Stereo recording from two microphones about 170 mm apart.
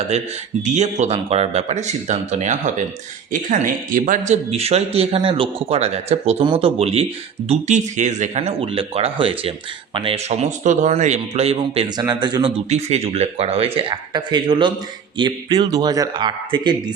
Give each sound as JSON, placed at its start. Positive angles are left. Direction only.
{"t": 0.6, "sound": "a man's voice", "side_deg": -45}
{"t": 11.9, "sound": "speech", "side_deg": -25}
{"t": 12.7, "sound": "a man's voice", "side_deg": -40}